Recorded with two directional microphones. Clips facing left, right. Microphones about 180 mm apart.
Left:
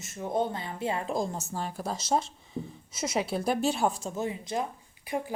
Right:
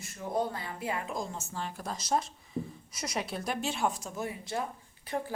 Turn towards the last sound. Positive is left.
turn(degrees=10)  # may be behind; listen again after turning